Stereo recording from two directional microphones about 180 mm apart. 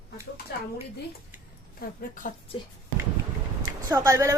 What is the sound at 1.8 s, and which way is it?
Speech, 50° left (ahead or behind).